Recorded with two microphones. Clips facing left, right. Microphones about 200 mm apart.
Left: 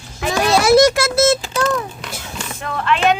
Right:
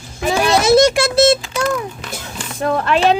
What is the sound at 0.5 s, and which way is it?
Speech, 25° right (ahead or behind).